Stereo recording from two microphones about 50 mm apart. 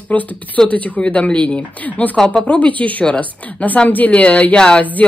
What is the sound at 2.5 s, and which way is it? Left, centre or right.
Speech, left.